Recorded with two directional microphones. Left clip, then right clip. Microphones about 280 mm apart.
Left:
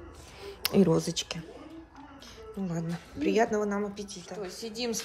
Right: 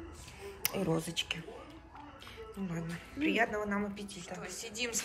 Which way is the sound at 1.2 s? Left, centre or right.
Left.